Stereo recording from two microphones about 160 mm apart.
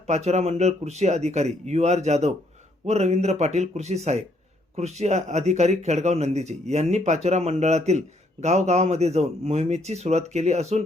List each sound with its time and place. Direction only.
0.1 s speech: 45° right (ahead or behind)